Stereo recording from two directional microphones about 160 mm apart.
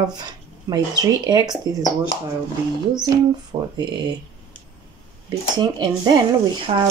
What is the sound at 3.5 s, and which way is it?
Speech, 30° right (ahead or behind).